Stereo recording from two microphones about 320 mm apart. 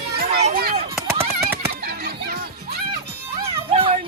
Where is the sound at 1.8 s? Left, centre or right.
Right.